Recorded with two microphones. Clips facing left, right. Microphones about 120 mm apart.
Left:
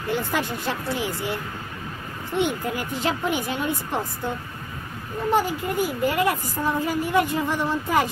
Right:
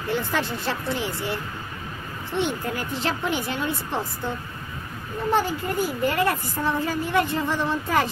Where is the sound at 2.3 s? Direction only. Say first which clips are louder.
Left 2 dB; 10° left (ahead or behind).